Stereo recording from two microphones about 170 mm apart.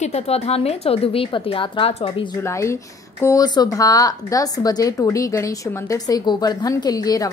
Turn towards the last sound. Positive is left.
turn(degrees=20)  # may be behind; listen again after turning